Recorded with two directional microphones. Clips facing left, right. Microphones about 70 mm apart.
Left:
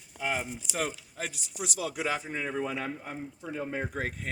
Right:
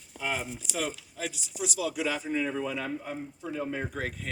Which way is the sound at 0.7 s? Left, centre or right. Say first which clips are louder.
Even; left.